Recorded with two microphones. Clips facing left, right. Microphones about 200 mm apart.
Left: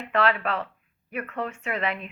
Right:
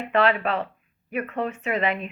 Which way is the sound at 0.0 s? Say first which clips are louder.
Right 3 dB; 25° right (ahead or behind).